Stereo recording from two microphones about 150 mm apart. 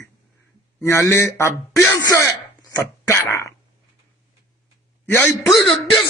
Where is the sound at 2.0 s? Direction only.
25° left (ahead or behind).